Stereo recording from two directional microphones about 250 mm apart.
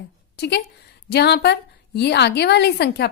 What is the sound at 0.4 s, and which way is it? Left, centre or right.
A woman's voice, left.